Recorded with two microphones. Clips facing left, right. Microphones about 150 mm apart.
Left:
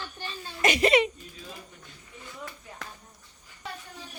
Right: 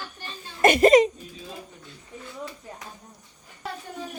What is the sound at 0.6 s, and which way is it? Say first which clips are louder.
Speech: right 7 dB; 50° right (ahead or behind).